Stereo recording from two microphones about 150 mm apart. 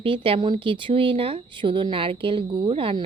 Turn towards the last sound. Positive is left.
turn(degrees=-35)  # may be behind; listen again after turning